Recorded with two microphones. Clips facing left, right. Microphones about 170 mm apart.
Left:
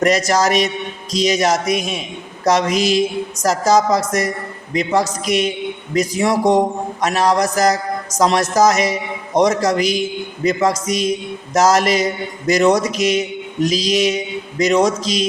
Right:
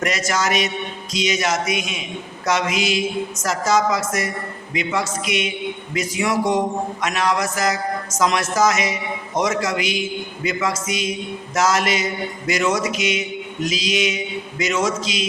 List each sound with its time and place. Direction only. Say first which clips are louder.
0.0 s a man's voice: left 7 dB; 35° left (ahead or behind)